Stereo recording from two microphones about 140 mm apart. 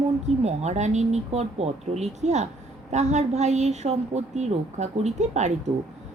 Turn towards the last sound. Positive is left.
turn(degrees=-55)  # may be behind; listen again after turning